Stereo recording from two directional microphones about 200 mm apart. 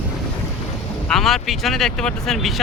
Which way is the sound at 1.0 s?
Centre (ahead or behind).